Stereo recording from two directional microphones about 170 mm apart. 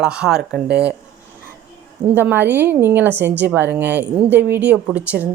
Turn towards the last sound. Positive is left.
turn(degrees=-10)  # may be behind; listen again after turning